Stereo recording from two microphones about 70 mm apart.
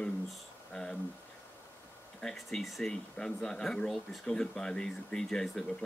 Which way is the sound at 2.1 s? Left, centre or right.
Centre.